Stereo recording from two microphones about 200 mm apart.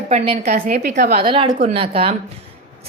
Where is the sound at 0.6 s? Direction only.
45° right (ahead or behind).